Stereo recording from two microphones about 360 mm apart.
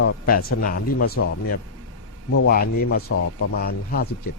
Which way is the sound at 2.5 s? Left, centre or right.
Left.